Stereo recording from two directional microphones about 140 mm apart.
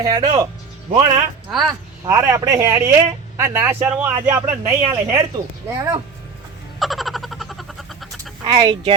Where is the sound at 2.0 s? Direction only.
25° right (ahead or behind).